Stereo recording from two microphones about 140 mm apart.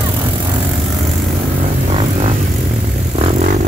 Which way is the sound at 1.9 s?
50° right (ahead or behind).